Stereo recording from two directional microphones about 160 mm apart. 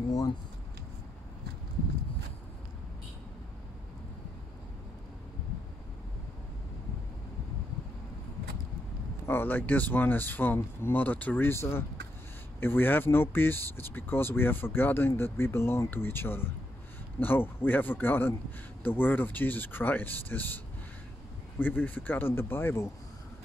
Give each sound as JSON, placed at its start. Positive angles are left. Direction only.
{"t": 9.2, "sound": "speech", "side_deg": 15}
{"t": 21.5, "sound": "speech", "side_deg": 10}